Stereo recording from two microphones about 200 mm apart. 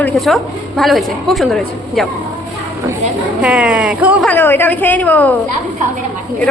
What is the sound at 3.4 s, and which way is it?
Speech, 5° right (ahead or behind).